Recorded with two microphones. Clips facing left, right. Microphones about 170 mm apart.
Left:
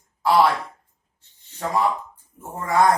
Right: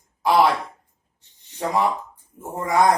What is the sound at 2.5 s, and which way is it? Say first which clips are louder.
Speech: even; 15° right (ahead or behind).